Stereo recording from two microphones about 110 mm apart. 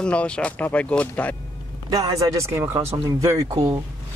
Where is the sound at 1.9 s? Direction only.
30° right (ahead or behind).